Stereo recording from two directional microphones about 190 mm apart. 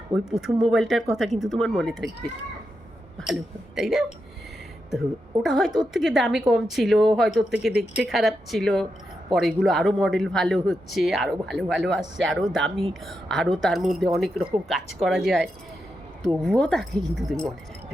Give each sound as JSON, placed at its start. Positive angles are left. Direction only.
{"t": 0.1, "sound": "speech", "side_deg": -5}
{"t": 3.8, "sound": "speech", "side_deg": 0}
{"t": 5.4, "sound": "speech", "side_deg": 0}